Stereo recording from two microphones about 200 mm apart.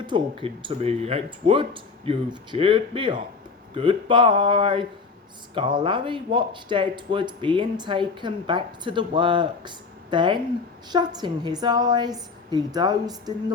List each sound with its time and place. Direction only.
0.1 s speech: 25° right (ahead or behind)